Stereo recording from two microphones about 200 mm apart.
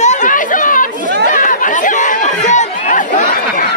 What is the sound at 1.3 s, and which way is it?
Chatter, 40° left (ahead or behind).